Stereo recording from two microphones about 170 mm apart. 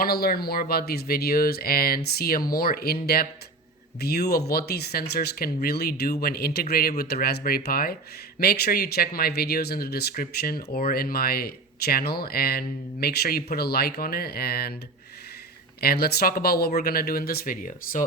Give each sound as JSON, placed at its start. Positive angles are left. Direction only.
{"t": 0.0, "sound": "speech", "side_deg": 65}
{"t": 15.8, "sound": "speech", "side_deg": 65}